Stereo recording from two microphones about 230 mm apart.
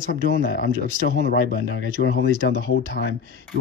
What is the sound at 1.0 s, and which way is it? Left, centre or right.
Speech, left.